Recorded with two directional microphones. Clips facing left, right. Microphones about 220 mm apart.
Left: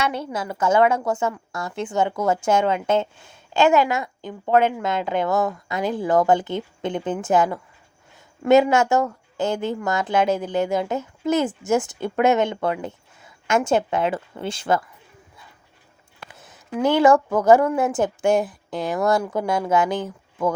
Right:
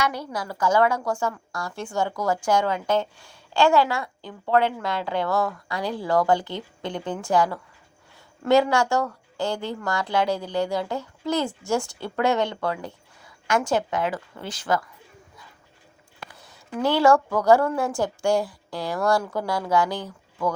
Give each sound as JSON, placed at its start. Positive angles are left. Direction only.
{"t": 0.0, "sound": "speech", "side_deg": 25}
{"t": 16.3, "sound": "a sound", "side_deg": 20}
{"t": 16.7, "sound": "speech", "side_deg": 20}